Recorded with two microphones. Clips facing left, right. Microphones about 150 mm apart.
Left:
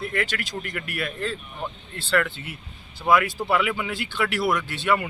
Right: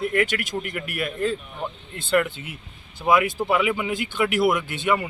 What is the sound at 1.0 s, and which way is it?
Speech, 10° right (ahead or behind).